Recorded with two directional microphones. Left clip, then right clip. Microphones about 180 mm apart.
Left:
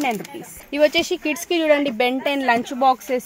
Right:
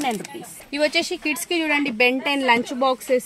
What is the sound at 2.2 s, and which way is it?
A woman's voice, 35° left (ahead or behind).